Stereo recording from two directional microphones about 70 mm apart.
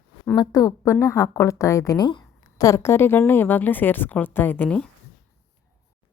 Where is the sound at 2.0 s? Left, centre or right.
Left.